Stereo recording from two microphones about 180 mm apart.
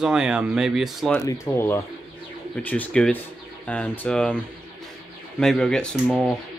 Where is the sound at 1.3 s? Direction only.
15° left (ahead or behind).